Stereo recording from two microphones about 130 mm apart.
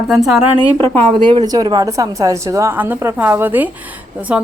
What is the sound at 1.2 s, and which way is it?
Speech, 45° right (ahead or behind).